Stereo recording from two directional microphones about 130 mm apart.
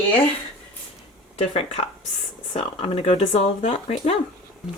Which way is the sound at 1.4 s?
50° left (ahead or behind).